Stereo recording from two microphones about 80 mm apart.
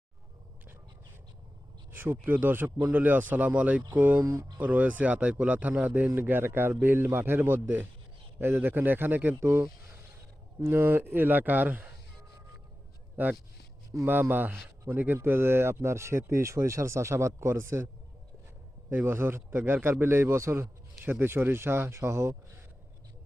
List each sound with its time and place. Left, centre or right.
1.9 s a sound: right
2.2 s a man's voice: right
4.2 s a man's voice: right
4.6 s a man's voice: centre
10.6 s a man's voice: right
13.2 s a man's voice: right
18.9 s a man's voice: right